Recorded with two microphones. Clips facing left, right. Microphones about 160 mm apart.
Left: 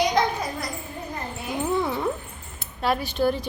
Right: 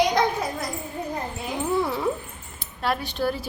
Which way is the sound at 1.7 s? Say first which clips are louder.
Right 1 dB; centre (ahead or behind).